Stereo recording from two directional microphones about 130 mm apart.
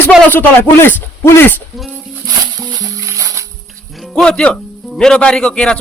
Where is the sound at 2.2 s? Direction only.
30° right (ahead or behind).